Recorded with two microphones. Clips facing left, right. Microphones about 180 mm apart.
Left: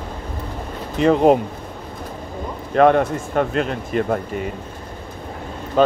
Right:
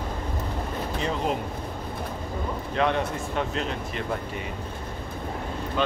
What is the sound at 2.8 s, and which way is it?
Speech, 50° left (ahead or behind).